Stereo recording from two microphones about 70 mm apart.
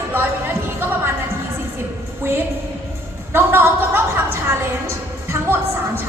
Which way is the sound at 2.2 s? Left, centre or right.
Right.